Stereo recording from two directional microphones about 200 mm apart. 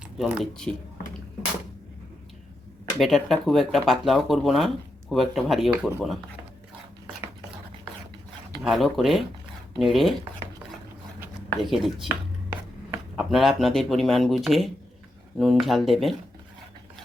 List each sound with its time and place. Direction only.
0.2 s speech: 5° right (ahead or behind)
3.0 s speech: centre (ahead or behind)
8.6 s speech: centre (ahead or behind)
11.6 s speech: centre (ahead or behind)
13.1 s speech: centre (ahead or behind)